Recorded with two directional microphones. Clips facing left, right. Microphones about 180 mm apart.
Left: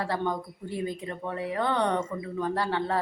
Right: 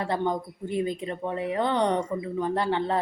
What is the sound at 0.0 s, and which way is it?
Speech, 20° right (ahead or behind).